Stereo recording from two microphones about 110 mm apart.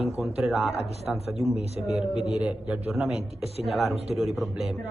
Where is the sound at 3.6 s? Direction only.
70° right (ahead or behind).